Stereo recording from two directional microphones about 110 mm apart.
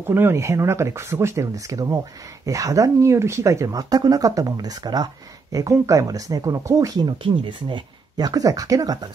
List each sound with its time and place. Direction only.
0.0 s speech: 20° right (ahead or behind); by 7.2 s 35° right (ahead or behind)
7.2 s speech: 45° right (ahead or behind)